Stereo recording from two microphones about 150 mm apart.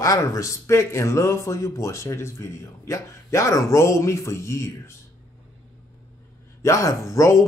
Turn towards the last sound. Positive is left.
turn(degrees=20)  # may be behind; listen again after turning